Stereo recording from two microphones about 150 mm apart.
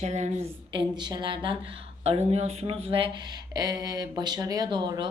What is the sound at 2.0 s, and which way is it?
Speech, 45° right (ahead or behind).